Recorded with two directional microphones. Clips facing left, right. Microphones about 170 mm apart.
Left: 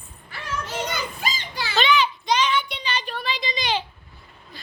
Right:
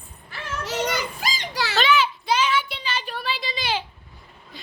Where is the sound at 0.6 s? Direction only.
80° right.